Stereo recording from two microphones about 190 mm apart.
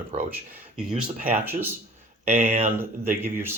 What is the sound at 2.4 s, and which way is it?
Speech, 35° right (ahead or behind).